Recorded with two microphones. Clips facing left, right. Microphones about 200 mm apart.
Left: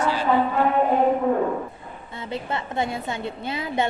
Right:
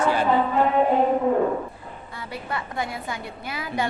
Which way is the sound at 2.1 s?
25° left (ahead or behind).